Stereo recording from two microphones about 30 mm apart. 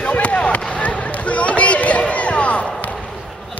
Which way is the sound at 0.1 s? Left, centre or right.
Left.